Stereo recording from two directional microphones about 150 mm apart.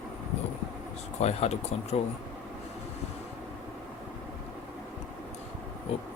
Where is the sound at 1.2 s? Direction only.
45° left (ahead or behind).